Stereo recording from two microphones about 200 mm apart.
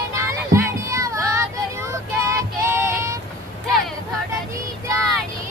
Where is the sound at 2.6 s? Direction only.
15° right (ahead or behind).